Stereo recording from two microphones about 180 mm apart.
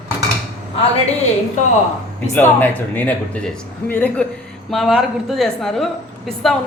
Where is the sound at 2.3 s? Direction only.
10° left (ahead or behind).